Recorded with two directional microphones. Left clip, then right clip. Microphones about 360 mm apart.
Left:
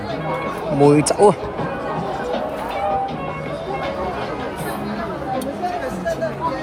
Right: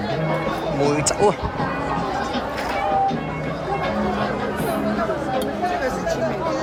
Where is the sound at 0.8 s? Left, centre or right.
Centre.